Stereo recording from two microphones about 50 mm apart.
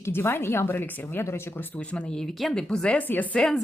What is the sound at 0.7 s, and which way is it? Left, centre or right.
Speech, left.